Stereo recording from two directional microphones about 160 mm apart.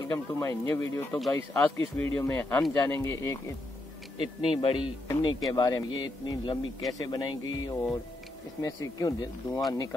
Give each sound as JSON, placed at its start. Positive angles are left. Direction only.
{"t": 0.1, "sound": "speech", "side_deg": 15}
{"t": 4.2, "sound": "speech", "side_deg": 35}
{"t": 5.0, "sound": "speech", "side_deg": 25}